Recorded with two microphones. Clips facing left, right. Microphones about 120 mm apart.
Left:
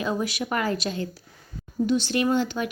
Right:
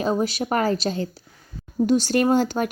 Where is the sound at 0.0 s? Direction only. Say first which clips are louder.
Right 4 dB; 35° right (ahead or behind).